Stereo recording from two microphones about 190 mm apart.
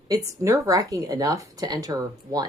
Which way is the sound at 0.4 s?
15° right (ahead or behind).